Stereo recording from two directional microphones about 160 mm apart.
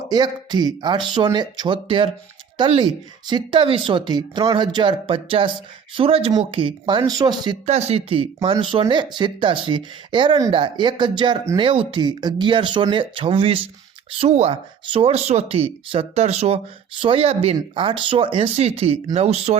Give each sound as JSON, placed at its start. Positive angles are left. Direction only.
{"t": 0.1, "sound": "speech", "side_deg": -25}
{"t": 7.7, "sound": "speech", "side_deg": -40}